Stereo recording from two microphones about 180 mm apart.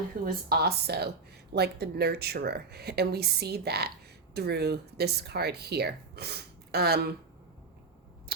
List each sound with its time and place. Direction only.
0.4 s speech: 60° right (ahead or behind)